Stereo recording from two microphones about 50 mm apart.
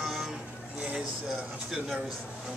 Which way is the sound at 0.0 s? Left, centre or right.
Centre.